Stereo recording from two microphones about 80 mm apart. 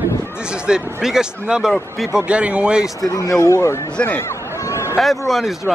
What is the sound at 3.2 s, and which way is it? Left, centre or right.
Speech, left.